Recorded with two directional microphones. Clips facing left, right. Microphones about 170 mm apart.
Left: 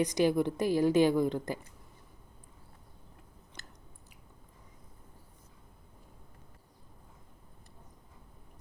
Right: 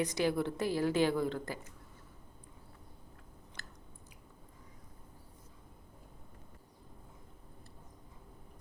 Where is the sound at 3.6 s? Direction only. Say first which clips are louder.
Left 1 dB; 20° left (ahead or behind).